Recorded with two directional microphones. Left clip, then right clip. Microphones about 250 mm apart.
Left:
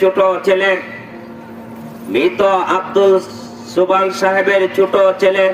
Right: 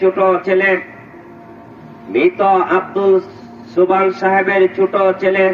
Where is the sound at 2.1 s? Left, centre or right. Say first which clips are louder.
Right 1 dB; centre.